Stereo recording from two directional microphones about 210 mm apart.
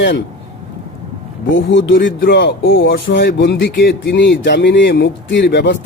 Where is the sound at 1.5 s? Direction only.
60° left (ahead or behind).